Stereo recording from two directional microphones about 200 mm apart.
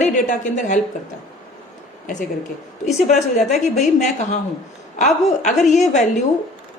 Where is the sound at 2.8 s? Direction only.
35° left (ahead or behind).